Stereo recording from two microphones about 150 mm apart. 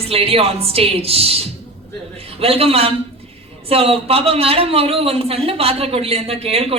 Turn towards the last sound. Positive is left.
turn(degrees=-40)  # may be behind; listen again after turning